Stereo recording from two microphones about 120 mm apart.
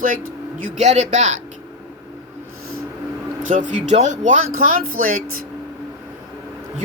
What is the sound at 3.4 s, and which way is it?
Speech, 90° right.